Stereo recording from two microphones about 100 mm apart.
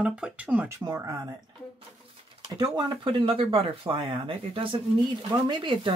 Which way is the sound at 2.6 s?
45° right (ahead or behind).